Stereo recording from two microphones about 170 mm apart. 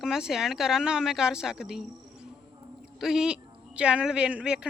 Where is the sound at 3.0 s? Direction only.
5° right (ahead or behind).